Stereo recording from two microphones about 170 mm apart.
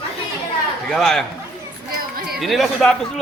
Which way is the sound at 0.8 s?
5° left (ahead or behind).